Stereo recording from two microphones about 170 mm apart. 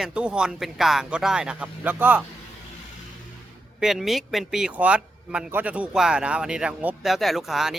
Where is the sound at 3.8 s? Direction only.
Centre (ahead or behind).